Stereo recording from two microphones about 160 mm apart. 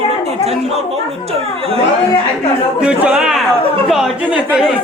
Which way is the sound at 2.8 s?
5° right (ahead or behind).